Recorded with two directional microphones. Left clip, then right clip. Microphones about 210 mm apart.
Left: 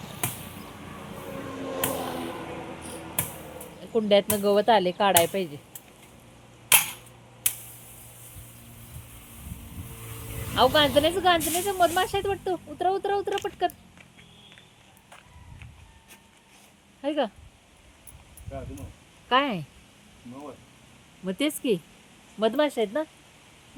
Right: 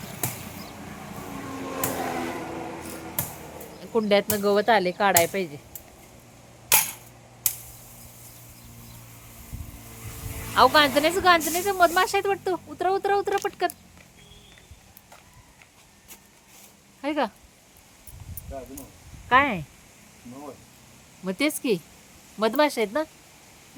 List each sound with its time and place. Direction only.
1.4 s a sound: 50° right (ahead or behind)
3.9 s speech: 5° left (ahead or behind)
10.5 s speech: centre (ahead or behind)
17.0 s speech: centre (ahead or behind)
19.3 s speech: 10° left (ahead or behind)
21.2 s speech: centre (ahead or behind)